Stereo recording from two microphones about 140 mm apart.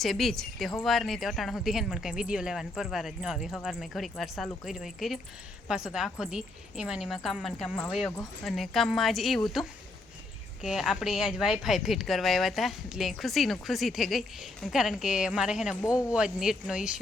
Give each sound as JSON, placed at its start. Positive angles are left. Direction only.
{"t": 0.0, "sound": "a woman's voice", "side_deg": 0}